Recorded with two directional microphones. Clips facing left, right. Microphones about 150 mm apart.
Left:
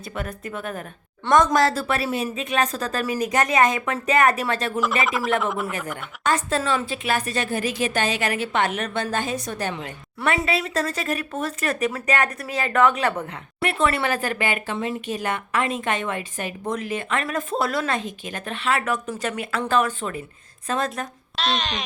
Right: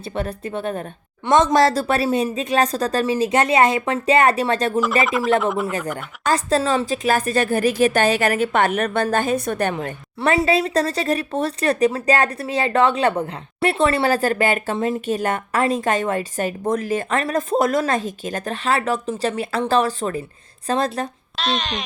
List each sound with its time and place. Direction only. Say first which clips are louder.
0.0 s a woman's voice: right 5 dB; 30° right (ahead or behind)
1.5 s speech: right 4 dB; 35° right (ahead or behind)
5.0 s speech: right 4 dB; centre (ahead or behind)
6.2 s a woman's voice: right 4 dB; 35° right (ahead or behind); by 9.9 s 55° right (ahead or behind)
10.2 s speech: right 5 dB; 35° right (ahead or behind)
21.3 s speech: right 1 dB; centre (ahead or behind)